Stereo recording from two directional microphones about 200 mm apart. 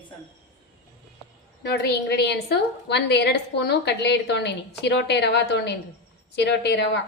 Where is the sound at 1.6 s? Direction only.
55° left (ahead or behind).